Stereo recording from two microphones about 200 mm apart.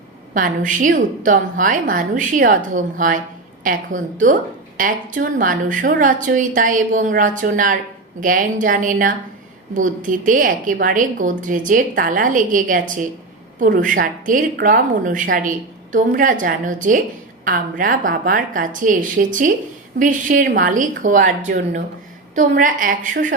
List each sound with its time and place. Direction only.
0.3 s a woman's voice: 40° right (ahead or behind)